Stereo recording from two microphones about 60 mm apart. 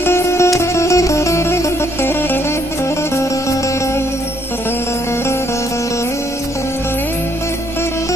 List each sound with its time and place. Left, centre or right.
0.0 s music: left
3.2 s music: left